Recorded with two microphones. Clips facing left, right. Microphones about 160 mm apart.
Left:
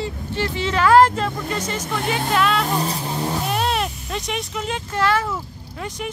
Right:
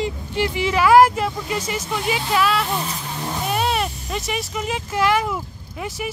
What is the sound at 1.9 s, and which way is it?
Speech, 50° left (ahead or behind).